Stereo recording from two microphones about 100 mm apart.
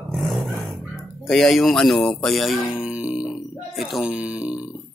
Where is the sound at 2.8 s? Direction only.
10° right (ahead or behind).